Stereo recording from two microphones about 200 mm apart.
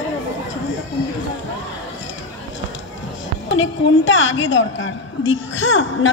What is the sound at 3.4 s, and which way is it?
A woman's voice, 70° left (ahead or behind).